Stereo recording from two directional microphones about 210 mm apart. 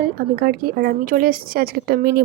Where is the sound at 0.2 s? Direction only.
45° right (ahead or behind).